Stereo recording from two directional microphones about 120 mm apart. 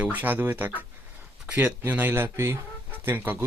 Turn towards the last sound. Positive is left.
turn(degrees=-15)  # may be behind; listen again after turning